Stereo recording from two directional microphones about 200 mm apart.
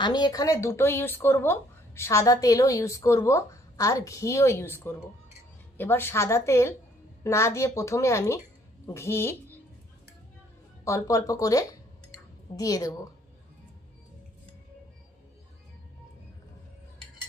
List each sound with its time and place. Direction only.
0.0 s a woman's voice: 20° left (ahead or behind)
10.9 s speech: 15° left (ahead or behind)